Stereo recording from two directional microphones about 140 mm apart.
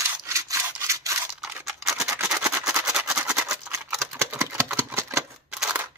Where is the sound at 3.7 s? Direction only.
20° right (ahead or behind).